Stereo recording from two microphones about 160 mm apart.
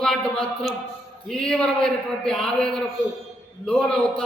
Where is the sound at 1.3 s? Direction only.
5° left (ahead or behind).